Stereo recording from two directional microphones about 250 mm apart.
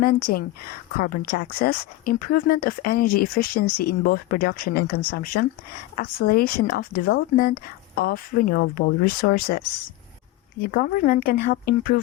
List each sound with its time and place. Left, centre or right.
0.0 s speech: left
10.7 s speech: left